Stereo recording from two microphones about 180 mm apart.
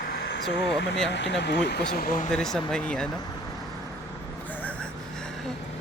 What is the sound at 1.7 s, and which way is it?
Speech, 65° left (ahead or behind).